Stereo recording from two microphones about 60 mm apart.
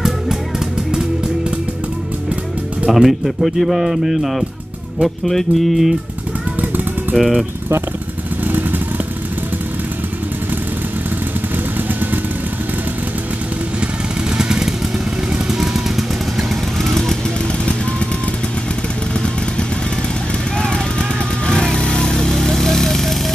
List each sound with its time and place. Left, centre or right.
2.9 s speech: centre
6.6 s a sound: right
8.5 s vehicle: right
14.3 s vehicle: centre
16.9 s vehicle: centre
20.5 s vehicle: centre